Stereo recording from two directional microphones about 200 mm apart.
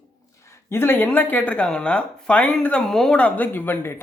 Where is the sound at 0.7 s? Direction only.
10° left (ahead or behind).